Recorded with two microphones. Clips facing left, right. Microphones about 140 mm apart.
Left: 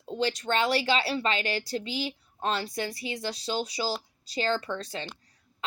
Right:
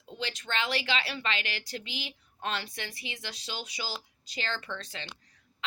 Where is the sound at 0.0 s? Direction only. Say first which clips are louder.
Left 9 dB; 40° left (ahead or behind).